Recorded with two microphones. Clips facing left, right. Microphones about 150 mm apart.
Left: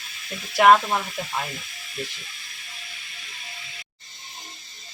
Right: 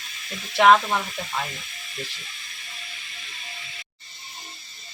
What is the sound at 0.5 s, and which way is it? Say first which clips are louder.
Speech: left 1 dB; 10° left (ahead or behind).